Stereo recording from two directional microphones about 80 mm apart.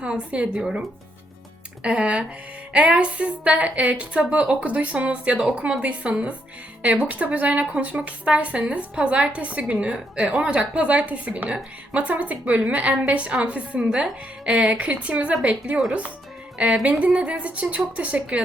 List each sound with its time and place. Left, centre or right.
0.0 s a woman's voice: centre